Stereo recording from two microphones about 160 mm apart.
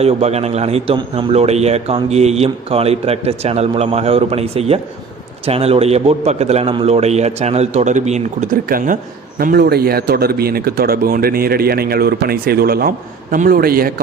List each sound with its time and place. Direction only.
0.0 s speech: 40° right (ahead or behind)
8.6 s speech: 60° right (ahead or behind)
9.4 s speech: 70° right (ahead or behind)